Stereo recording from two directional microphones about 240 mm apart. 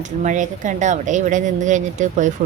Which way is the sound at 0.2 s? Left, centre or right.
Right.